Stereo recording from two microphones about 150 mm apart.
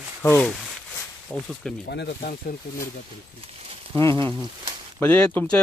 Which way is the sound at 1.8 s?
90° left.